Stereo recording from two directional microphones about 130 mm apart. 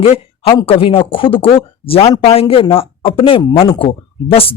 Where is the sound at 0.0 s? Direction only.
45° left (ahead or behind).